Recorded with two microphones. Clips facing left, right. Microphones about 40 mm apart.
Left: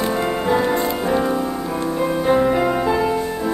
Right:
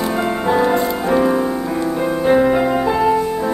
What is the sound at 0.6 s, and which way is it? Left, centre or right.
Music, centre.